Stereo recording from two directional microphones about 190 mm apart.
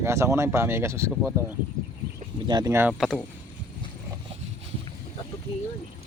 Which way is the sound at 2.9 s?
Centre (ahead or behind).